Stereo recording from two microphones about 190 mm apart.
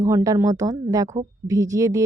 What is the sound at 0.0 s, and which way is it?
A woman's voice, 15° right (ahead or behind).